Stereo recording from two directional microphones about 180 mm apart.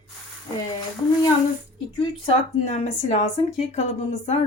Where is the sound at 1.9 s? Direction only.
30° left (ahead or behind).